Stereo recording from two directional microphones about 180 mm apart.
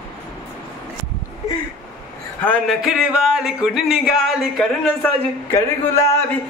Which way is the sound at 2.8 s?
5° right (ahead or behind).